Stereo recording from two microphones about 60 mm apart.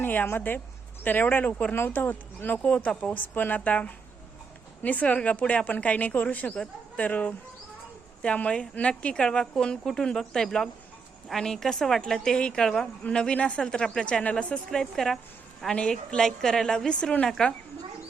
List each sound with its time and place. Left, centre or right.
0.0 s a woman's voice: left
2.6 s a woman's voice: left
3.2 s a woman's voice: left; by 12.9 s centre
13.1 s speech: centre